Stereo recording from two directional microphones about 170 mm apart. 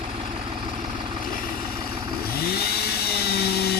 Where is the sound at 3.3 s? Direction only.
70° left (ahead or behind).